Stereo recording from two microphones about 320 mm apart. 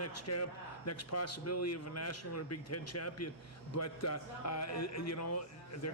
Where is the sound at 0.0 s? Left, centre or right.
Left.